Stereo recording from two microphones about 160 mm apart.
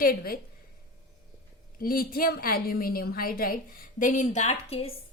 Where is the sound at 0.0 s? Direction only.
65° left (ahead or behind).